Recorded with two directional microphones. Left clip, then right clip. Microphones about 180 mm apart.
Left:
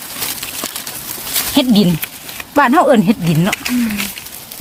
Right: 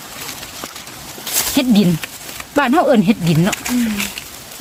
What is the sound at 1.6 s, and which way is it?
Speech, 15° left (ahead or behind).